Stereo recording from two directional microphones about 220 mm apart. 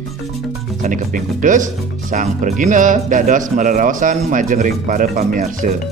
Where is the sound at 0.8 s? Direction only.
35° right (ahead or behind).